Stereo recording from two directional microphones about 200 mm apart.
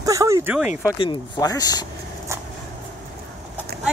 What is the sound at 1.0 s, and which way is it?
Speech, 20° left (ahead or behind).